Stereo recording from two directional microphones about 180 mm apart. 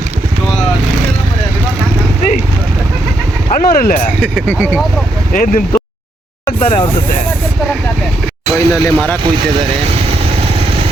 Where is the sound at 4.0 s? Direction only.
5° left (ahead or behind).